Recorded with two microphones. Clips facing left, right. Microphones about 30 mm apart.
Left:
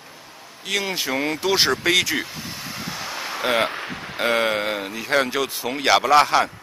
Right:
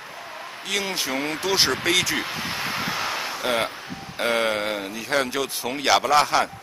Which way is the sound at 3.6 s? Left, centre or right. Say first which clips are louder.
Left 5 dB; left.